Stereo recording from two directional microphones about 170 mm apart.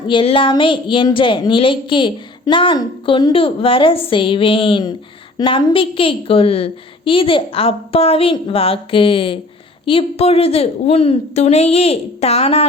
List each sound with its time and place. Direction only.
0.1 s a woman's voice: 30° left (ahead or behind)